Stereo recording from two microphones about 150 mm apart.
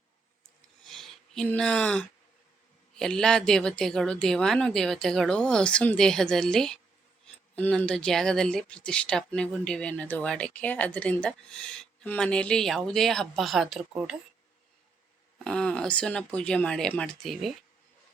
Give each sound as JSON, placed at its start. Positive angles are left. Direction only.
{"t": 0.9, "sound": "a sound", "side_deg": 0}
{"t": 3.0, "sound": "speech", "side_deg": 5}
{"t": 15.4, "sound": "speech", "side_deg": 5}